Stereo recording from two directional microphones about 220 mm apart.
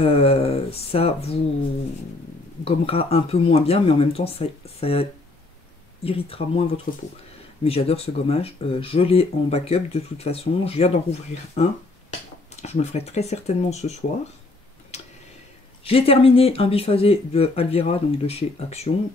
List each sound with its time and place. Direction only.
0.0 s speech: 25° left (ahead or behind)
2.6 s speech: 25° left (ahead or behind)
6.0 s speech: 25° left (ahead or behind)
6.9 s speech: 40° left (ahead or behind)
7.6 s speech: 25° left (ahead or behind)
12.6 s speech: 30° left (ahead or behind)
15.8 s speech: 25° left (ahead or behind)